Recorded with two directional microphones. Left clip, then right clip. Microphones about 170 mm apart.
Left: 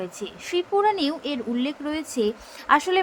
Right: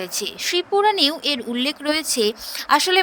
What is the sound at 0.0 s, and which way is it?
Speech, 65° right (ahead or behind).